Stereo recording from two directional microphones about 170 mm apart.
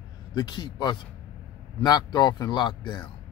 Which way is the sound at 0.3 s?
25° left (ahead or behind).